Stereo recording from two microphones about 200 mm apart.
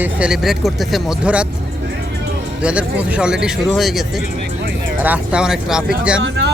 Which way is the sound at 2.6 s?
5° right (ahead or behind).